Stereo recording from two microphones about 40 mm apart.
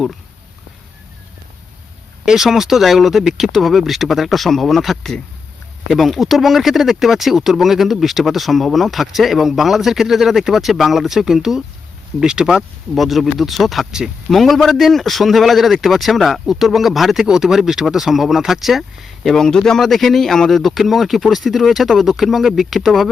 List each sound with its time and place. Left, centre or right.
2.2 s speech: centre
12.9 s speech: centre
17.2 s speech: centre
19.2 s speech: centre